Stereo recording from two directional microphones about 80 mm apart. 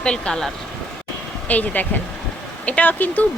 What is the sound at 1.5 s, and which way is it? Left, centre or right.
Speech, left.